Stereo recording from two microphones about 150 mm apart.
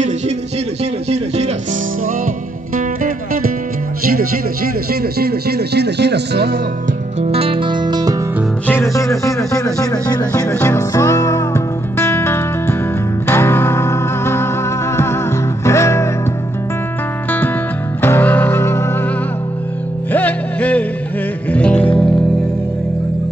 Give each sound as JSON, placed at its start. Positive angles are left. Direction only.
{"t": 1.1, "sound": "music", "side_deg": -45}
{"t": 2.7, "sound": "music", "side_deg": -70}
{"t": 5.2, "sound": "music", "side_deg": -90}
{"t": 7.2, "sound": "music", "side_deg": -40}
{"t": 8.6, "sound": "music", "side_deg": 20}
{"t": 10.5, "sound": "music", "side_deg": 15}
{"t": 18.0, "sound": "music", "side_deg": 15}
{"t": 20.1, "sound": "music", "side_deg": 10}